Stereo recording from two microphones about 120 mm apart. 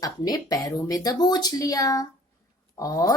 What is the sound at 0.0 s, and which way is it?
A woman's voice, 30° left (ahead or behind).